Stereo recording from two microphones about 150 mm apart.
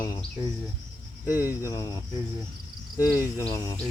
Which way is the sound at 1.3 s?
10° right (ahead or behind).